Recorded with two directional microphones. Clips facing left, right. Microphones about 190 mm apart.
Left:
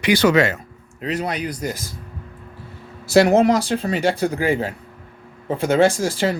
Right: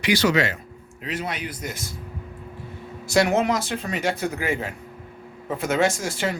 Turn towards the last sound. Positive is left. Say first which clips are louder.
# left 6 dB
turn(degrees=30)  # may be behind; listen again after turning